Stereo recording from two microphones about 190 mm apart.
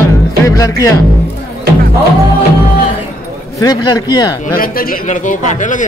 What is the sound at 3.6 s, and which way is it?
Speech, 20° left (ahead or behind).